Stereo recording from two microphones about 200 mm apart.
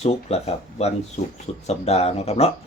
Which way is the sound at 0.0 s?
30° left (ahead or behind).